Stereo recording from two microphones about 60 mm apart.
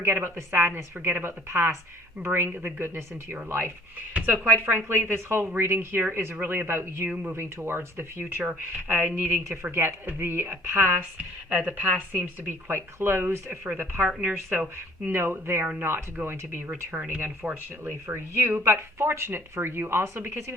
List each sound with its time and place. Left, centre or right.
0.0 s speech: right
2.5 s speech: right
7.1 s speech: right
7.3 s speech: right
11.4 s speech: right
12.1 s speech: right
14.1 s speech: centre
15.0 s speech: right